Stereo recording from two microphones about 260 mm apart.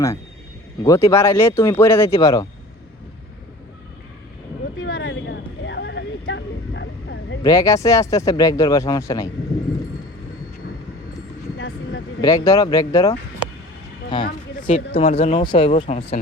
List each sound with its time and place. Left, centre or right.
0.8 s speech: centre
4.8 s a sound: left
7.4 s speech: centre
11.5 s vehicle: left
12.2 s speech: centre